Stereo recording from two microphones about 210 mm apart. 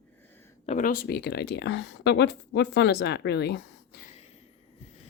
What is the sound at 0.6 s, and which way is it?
Speech, 35° left (ahead or behind).